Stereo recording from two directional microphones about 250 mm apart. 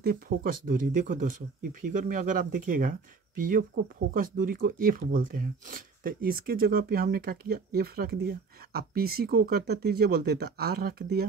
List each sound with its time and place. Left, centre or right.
0.0 s speech: right